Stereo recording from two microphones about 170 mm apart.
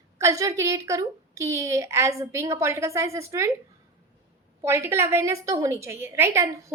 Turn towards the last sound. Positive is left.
turn(degrees=-15)  # may be behind; listen again after turning